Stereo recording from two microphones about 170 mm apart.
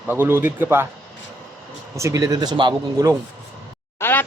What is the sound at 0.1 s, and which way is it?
Speech, 10° right (ahead or behind).